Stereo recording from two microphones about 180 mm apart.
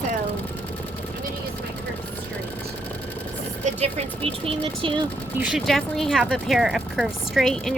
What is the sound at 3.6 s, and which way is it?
Speech, 35° right (ahead or behind).